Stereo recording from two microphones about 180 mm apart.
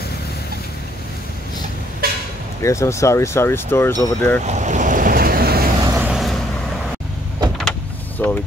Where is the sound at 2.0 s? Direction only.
55° right (ahead or behind).